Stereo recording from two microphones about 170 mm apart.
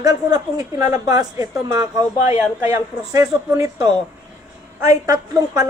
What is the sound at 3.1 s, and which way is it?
Speech, 20° right (ahead or behind).